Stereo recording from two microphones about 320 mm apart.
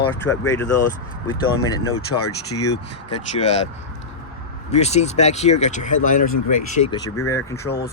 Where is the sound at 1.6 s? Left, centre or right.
Centre.